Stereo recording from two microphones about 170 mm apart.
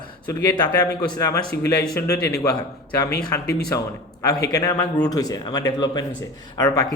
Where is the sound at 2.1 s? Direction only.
70° left (ahead or behind).